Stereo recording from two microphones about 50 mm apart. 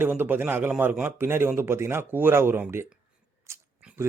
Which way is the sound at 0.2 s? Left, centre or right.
Right.